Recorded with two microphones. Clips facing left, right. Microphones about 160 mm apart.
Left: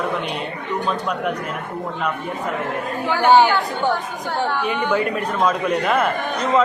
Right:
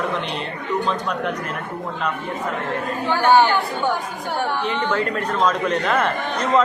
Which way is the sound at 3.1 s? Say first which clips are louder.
Left 1 dB; 15° left (ahead or behind).